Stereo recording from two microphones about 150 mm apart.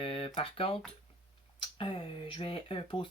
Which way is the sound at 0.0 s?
40° left (ahead or behind).